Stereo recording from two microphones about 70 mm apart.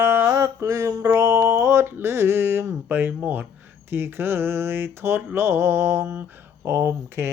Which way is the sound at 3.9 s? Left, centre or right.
Right.